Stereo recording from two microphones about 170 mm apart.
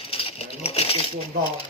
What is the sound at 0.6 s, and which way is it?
Coin, 35° left (ahead or behind).